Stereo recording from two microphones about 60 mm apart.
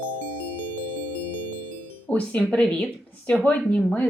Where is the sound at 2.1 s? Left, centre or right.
Centre.